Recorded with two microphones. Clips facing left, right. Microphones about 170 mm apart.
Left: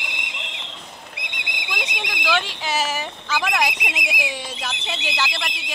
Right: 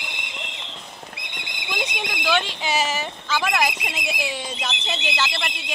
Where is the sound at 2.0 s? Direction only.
20° right (ahead or behind).